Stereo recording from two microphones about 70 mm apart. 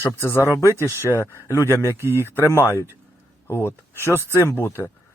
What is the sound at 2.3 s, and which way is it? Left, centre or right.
Speech, left.